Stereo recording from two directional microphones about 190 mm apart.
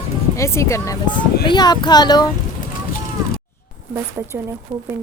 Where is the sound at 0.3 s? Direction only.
15° left (ahead or behind).